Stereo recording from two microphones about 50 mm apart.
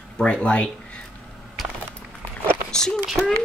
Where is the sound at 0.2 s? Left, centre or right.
Left.